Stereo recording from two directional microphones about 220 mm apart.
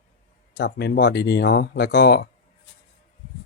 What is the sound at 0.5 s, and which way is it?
Speech, 45° left (ahead or behind).